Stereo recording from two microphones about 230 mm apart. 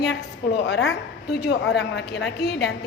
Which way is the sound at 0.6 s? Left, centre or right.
Left.